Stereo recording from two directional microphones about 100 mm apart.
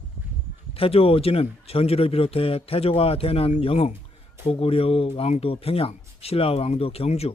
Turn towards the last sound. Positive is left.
turn(degrees=85)